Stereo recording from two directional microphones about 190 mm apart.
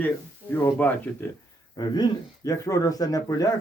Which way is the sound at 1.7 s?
20° left (ahead or behind).